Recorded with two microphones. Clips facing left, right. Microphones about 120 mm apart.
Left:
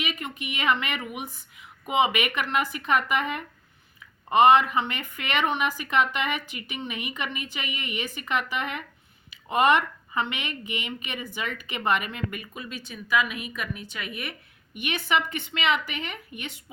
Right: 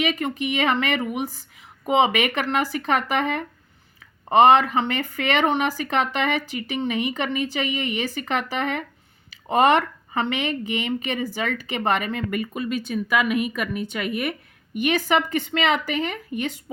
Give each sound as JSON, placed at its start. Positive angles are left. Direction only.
{"t": 0.0, "sound": "speech", "side_deg": -35}
{"t": 12.3, "sound": "speech", "side_deg": -60}
{"t": 14.8, "sound": "speech", "side_deg": -40}